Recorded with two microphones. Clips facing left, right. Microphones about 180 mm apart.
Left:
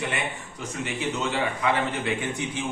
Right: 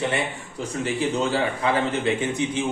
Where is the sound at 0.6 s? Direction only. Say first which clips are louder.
Right 6 dB; 35° right (ahead or behind).